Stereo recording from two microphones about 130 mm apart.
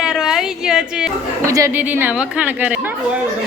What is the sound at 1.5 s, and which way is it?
Speech, 25° right (ahead or behind).